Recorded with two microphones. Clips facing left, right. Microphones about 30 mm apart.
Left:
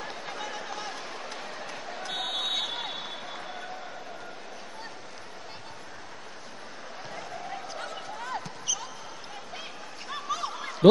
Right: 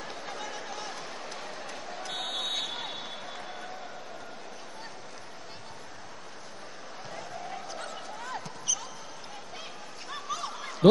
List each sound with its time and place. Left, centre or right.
0.0 s a sound: centre
7.2 s basketball bounce: centre
10.0 s basketball bounce: centre